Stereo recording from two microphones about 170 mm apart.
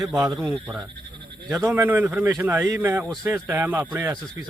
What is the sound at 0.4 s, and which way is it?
A man's voice, 5° right (ahead or behind).